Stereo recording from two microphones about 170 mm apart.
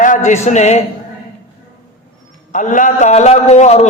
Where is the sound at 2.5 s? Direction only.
50° left (ahead or behind).